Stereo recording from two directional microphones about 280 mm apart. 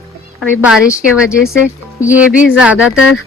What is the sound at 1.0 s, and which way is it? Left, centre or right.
Speech, centre.